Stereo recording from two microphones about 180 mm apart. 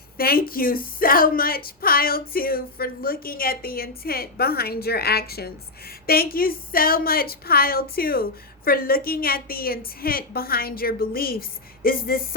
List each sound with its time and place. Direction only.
0.2 s a woman's voice: 55° left (ahead or behind)